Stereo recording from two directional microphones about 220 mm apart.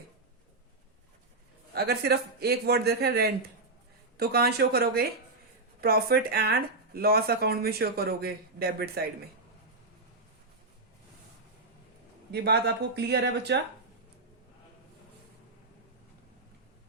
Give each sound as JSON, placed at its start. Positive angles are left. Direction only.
{"t": 1.7, "sound": "speech", "side_deg": -45}
{"t": 12.3, "sound": "speech", "side_deg": -50}